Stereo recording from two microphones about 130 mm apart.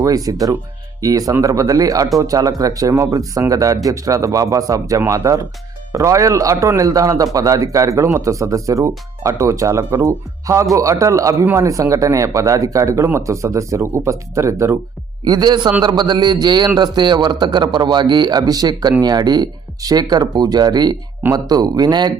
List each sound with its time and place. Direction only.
0.0 s speech: 30° right (ahead or behind)